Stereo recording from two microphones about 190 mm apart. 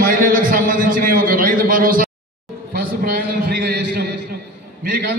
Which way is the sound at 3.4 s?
55° right (ahead or behind).